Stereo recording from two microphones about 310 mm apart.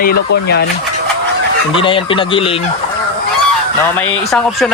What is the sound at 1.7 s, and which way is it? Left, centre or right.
Speech, centre.